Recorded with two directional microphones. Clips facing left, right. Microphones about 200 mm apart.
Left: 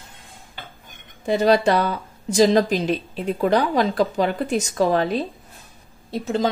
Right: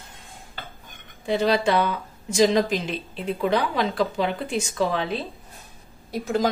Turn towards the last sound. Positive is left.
turn(degrees=25)  # may be behind; listen again after turning